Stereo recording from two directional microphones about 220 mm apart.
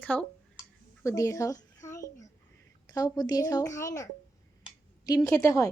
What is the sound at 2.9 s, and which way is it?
Speech, 15° left (ahead or behind).